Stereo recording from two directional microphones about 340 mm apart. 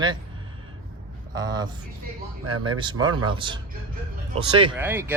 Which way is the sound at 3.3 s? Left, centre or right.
Centre.